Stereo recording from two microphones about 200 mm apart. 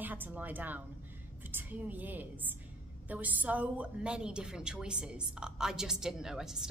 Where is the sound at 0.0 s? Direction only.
10° right (ahead or behind).